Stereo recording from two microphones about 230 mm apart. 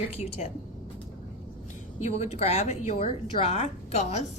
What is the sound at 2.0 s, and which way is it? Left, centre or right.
Speech, left.